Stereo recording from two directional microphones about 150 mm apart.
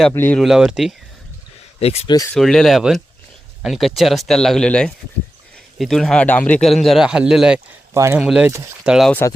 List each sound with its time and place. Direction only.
0.1 s speech: 15° left (ahead or behind)
0.3 s a man's voice: centre (ahead or behind)
1.8 s speech: 45° left (ahead or behind)
2.0 s speech: 25° left (ahead or behind)
2.3 s a man's voice: 5° left (ahead or behind)
7.9 s a man's voice: 15° right (ahead or behind)